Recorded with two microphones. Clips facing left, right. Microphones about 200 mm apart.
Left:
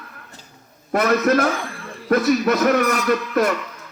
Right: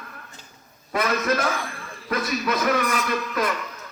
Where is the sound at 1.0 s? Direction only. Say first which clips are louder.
Left 6 dB; 45° left (ahead or behind).